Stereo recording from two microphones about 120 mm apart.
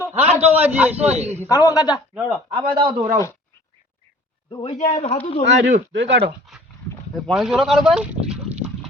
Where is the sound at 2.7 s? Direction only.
40° right (ahead or behind).